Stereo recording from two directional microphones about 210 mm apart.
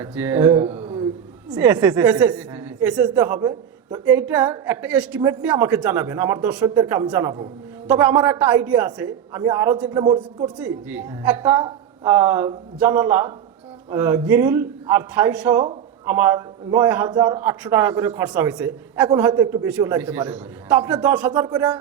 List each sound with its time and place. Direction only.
0.0 s a man's voice: 10° right (ahead or behind)
10.4 s a man's voice: 5° right (ahead or behind)